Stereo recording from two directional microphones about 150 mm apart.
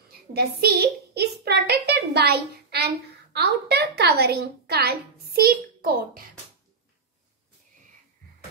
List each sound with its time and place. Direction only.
0.3 s a woman's voice: 90° right